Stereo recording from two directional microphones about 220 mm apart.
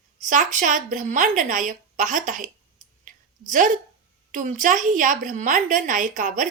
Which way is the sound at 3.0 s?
35° right (ahead or behind).